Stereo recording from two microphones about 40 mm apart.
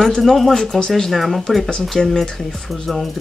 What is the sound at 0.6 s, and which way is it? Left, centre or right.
Speech, centre.